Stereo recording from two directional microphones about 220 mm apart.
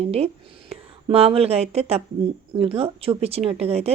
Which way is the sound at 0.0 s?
25° right (ahead or behind).